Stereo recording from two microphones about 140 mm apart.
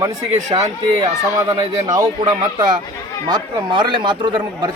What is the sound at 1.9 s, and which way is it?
A man's voice, 30° right (ahead or behind).